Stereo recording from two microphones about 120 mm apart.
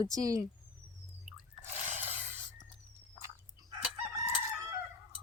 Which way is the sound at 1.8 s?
15° right (ahead or behind).